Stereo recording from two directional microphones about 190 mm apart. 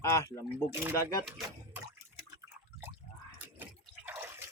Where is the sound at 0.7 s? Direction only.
10° right (ahead or behind).